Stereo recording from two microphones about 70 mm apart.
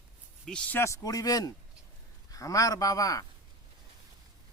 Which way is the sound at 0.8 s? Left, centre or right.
Left.